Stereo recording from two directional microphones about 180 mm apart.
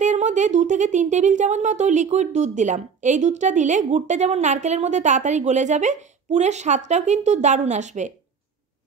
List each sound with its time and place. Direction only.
0.0 s speech: 40° right (ahead or behind)